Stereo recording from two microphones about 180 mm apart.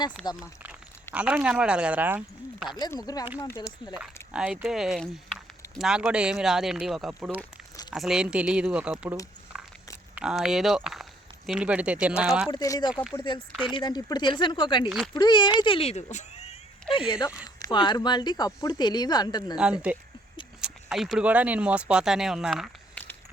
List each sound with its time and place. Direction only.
0.4 s speech: 5° right (ahead or behind)
2.7 s speech: 15° left (ahead or behind)
3.9 s speech: 5° right (ahead or behind)
9.5 s a sound: 5° right (ahead or behind)
10.2 s speech: 5° right (ahead or behind)
12.5 s speech: 20° left (ahead or behind)
14.8 s speech: 5° right (ahead or behind)
15.1 s speech: 25° left (ahead or behind)
17.1 s speech: 20° left (ahead or behind)
19.9 s speech: 10° right (ahead or behind)